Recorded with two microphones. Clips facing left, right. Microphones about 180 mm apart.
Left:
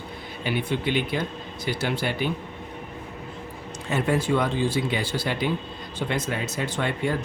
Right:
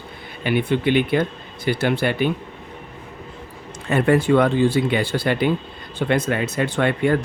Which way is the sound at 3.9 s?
60° right (ahead or behind).